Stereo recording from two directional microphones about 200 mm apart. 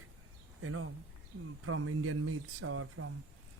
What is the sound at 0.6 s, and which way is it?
Speech, 90° right.